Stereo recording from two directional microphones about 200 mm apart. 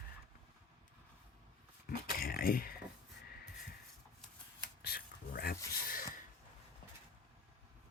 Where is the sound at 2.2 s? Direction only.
45° left (ahead or behind).